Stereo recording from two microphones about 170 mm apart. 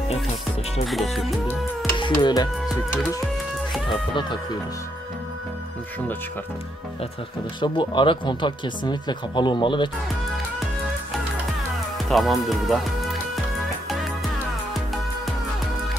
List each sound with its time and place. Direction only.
0.8 s music: centre (ahead or behind)
2.0 s speech: 25° left (ahead or behind)
3.9 s speech: 30° left (ahead or behind)
7.6 s speech: 25° left (ahead or behind)
12.1 s music: centre (ahead or behind)